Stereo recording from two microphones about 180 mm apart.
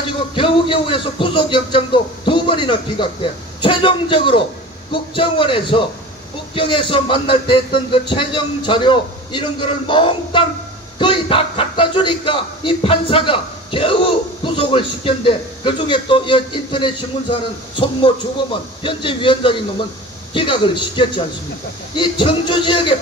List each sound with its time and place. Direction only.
0.3 s a man's voice: 30° left (ahead or behind)